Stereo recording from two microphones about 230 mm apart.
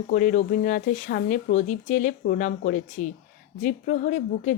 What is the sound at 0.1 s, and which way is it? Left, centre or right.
Speech, left.